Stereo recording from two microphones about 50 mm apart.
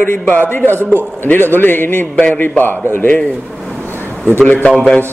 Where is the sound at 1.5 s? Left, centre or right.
Left.